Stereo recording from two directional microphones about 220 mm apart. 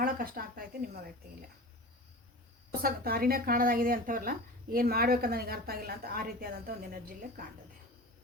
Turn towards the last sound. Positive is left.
turn(degrees=-40)  # may be behind; listen again after turning